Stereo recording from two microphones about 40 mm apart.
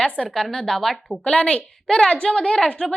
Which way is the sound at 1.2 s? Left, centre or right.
Left.